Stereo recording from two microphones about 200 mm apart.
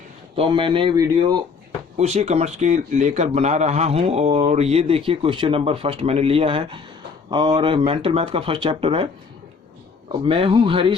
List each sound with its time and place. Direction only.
0.3 s speech: 25° right (ahead or behind)
2.0 s speech: 35° right (ahead or behind)
10.1 s speech: 25° right (ahead or behind)